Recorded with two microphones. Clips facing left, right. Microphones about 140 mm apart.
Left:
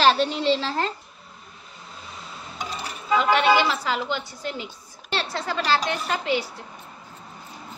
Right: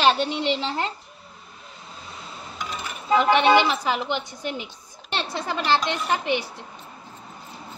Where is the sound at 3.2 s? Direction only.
20° right (ahead or behind).